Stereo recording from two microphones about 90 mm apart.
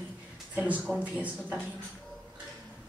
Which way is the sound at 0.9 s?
15° right (ahead or behind).